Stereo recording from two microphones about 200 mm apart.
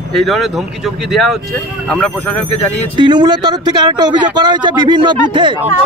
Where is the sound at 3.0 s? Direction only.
20° right (ahead or behind).